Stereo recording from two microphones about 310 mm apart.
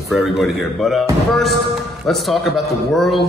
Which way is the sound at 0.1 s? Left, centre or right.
Centre.